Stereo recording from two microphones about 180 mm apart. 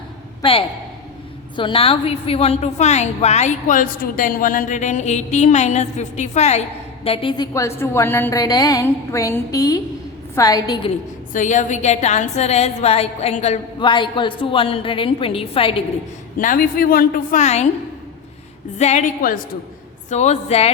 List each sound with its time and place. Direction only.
1.5 s a woman's voice: 30° left (ahead or behind)
7.5 s a woman's voice: 15° left (ahead or behind)
11.3 s a woman's voice: 40° left (ahead or behind)
16.4 s a woman's voice: 50° left (ahead or behind)
18.8 s a woman's voice: 40° left (ahead or behind)
20.1 s a woman's voice: 40° left (ahead or behind)